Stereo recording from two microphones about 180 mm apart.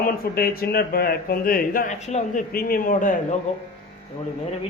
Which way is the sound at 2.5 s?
55° left (ahead or behind).